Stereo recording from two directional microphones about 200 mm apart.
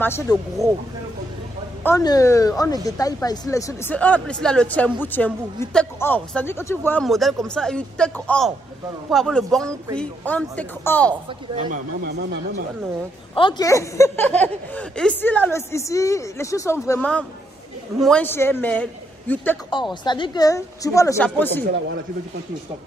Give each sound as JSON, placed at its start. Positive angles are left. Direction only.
{"t": 0.0, "sound": "speech", "side_deg": 10}
{"t": 1.9, "sound": "speech", "side_deg": 15}
{"t": 11.2, "sound": "speech", "side_deg": -35}
{"t": 12.0, "sound": "speech", "side_deg": -55}
{"t": 13.3, "sound": "speech", "side_deg": 25}
{"t": 19.7, "sound": "speech", "side_deg": 25}